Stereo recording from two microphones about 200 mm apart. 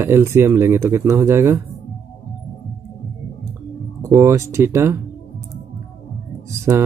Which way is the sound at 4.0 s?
15° right (ahead or behind).